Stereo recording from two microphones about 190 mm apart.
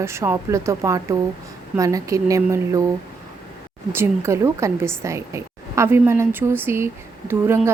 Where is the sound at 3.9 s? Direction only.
15° right (ahead or behind).